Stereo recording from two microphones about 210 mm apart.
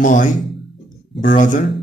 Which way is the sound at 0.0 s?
40° left (ahead or behind).